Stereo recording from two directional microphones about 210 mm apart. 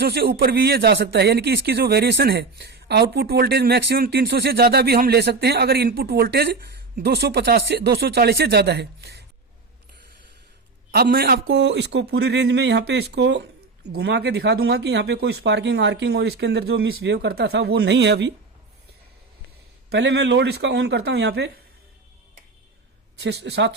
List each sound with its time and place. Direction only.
0.0 s speech: 50° right (ahead or behind)
10.9 s speech: 45° right (ahead or behind)
19.9 s speech: 55° right (ahead or behind)
23.2 s speech: 55° right (ahead or behind)